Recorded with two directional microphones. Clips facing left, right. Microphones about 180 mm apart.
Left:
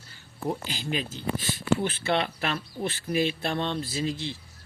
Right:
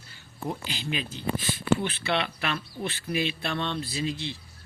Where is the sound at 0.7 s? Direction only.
45° left (ahead or behind).